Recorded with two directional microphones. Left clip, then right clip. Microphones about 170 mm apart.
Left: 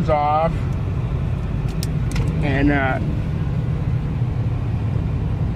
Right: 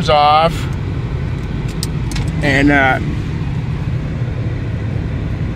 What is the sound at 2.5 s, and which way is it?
Speech, 15° right (ahead or behind).